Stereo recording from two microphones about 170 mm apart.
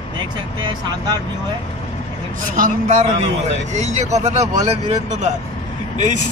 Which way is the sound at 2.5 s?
50° right (ahead or behind).